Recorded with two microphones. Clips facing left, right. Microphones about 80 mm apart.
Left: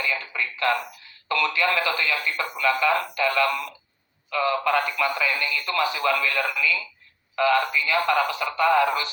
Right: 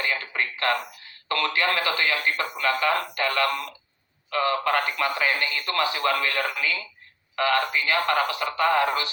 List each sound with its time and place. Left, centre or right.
0.0 s speech: right